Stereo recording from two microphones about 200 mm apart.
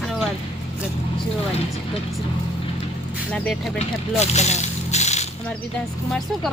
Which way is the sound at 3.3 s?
5° left (ahead or behind).